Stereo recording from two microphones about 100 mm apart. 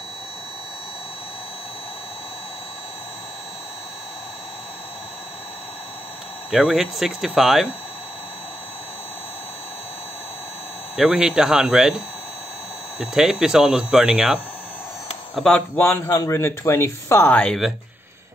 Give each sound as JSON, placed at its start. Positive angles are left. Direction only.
{"t": 6.5, "sound": "speech", "side_deg": -5}
{"t": 11.0, "sound": "speech", "side_deg": -5}
{"t": 13.0, "sound": "speech", "side_deg": -5}
{"t": 15.3, "sound": "speech", "side_deg": 5}
{"t": 15.8, "sound": "speech", "side_deg": 25}
{"t": 17.3, "sound": "speech", "side_deg": 10}